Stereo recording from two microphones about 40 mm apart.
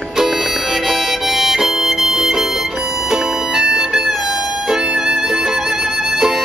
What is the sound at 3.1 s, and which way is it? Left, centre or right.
Music, centre.